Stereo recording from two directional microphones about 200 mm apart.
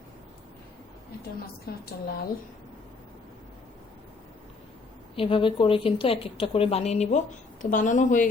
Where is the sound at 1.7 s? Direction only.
50° left (ahead or behind).